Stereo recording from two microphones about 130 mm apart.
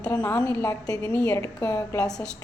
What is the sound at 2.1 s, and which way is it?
Speech, 5° left (ahead or behind).